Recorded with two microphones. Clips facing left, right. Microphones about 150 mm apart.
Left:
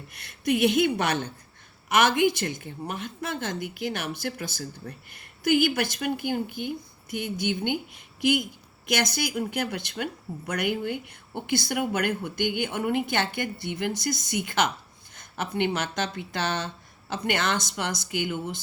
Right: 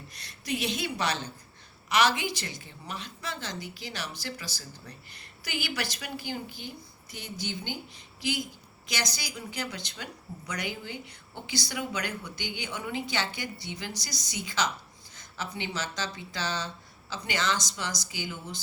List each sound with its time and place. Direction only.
0.1 s a woman's voice: 55° left (ahead or behind)